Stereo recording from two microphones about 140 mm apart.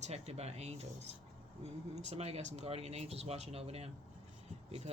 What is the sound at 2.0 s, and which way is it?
Speech, 50° right (ahead or behind).